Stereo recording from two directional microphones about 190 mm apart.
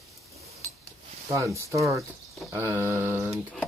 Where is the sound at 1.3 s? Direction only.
15° right (ahead or behind).